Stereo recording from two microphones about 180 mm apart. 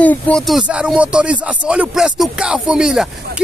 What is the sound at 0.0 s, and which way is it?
Music, 5° left (ahead or behind).